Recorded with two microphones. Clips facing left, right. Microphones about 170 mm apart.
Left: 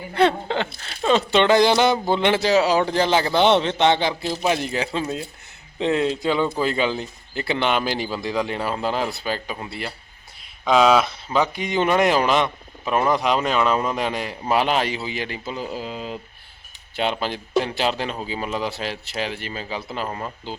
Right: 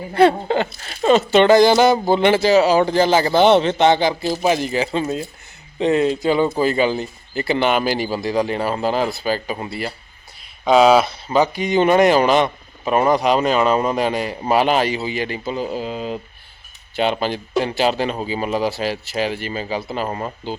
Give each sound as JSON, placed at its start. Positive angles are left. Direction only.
{"t": 0.1, "sound": "speech", "side_deg": -5}